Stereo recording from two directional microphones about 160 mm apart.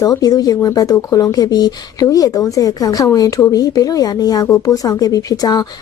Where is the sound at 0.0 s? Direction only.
25° left (ahead or behind).